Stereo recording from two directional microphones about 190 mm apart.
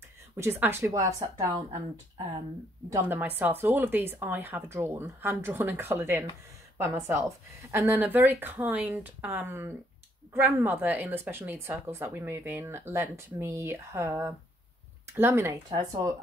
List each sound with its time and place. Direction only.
0.4 s speech: 10° right (ahead or behind)